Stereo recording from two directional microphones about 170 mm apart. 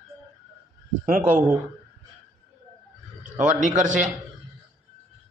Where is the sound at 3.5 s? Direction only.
45° right (ahead or behind).